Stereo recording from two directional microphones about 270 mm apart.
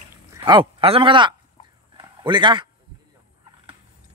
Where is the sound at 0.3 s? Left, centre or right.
Centre.